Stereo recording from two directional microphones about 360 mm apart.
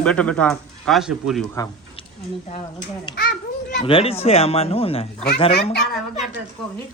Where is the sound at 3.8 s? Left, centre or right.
Centre.